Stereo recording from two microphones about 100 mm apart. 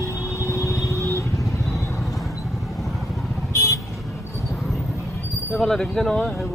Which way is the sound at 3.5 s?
30° left (ahead or behind).